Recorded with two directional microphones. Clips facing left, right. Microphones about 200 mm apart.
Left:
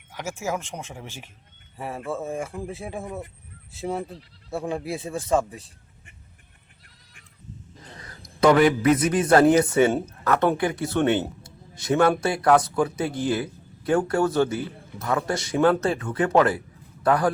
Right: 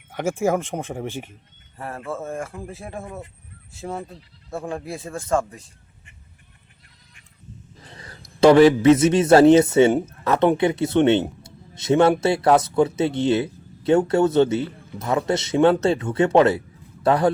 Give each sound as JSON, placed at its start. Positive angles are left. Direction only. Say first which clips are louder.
{"t": 0.1, "sound": "speech", "louder": "right 8 dB", "side_deg": -55}
{"t": 1.7, "sound": "speech", "louder": "even", "side_deg": 0}
{"t": 3.8, "sound": "speech", "louder": "left 2 dB", "side_deg": 15}
{"t": 4.1, "sound": "speech", "louder": "left 1 dB", "side_deg": 0}
{"t": 8.4, "sound": "a man's voice", "louder": "right 5 dB", "side_deg": -30}